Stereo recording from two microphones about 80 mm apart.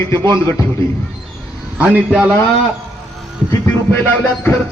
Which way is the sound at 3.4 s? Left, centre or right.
Left.